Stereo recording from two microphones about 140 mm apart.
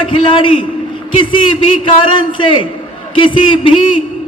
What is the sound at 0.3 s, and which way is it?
A man's voice, 35° left (ahead or behind).